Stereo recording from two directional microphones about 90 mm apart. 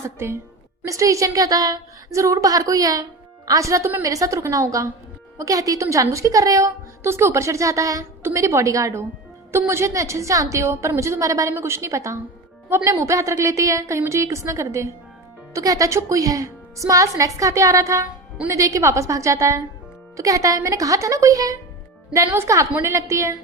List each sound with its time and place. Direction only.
0.2 s a woman's voice: 30° right (ahead or behind)
22.8 s a woman's voice: 30° right (ahead or behind)